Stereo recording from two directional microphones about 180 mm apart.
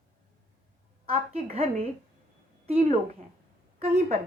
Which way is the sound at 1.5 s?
35° right (ahead or behind).